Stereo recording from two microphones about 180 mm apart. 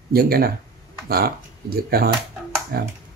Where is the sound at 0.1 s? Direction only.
55° right (ahead or behind).